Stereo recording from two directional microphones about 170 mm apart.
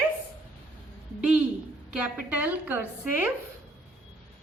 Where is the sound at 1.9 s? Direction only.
5° right (ahead or behind).